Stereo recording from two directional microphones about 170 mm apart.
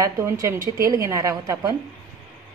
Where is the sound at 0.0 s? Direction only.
20° right (ahead or behind).